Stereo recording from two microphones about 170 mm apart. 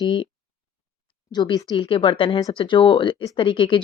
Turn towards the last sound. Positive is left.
turn(degrees=30)  # may be behind; listen again after turning